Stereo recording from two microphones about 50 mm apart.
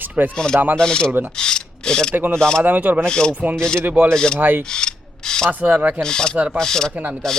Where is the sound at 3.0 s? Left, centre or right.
Centre.